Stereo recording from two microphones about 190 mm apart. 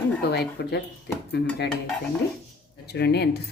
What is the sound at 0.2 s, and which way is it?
A woman's voice, 55° left (ahead or behind).